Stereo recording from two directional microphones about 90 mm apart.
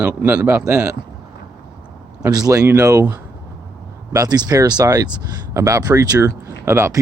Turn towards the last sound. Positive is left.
turn(degrees=-30)  # may be behind; listen again after turning